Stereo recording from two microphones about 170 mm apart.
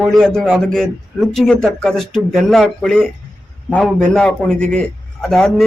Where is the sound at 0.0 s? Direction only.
Centre (ahead or behind).